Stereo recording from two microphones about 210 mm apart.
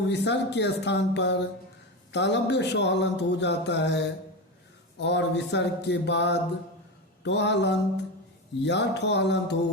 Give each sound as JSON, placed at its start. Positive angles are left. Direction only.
{"t": 0.1, "sound": "speech", "side_deg": 55}